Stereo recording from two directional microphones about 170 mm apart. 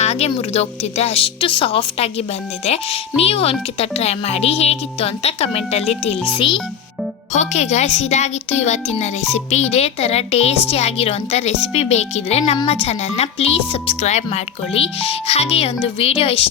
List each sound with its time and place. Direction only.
0.0 s a child's voice: 40° left (ahead or behind)
7.3 s speech: 40° left (ahead or behind)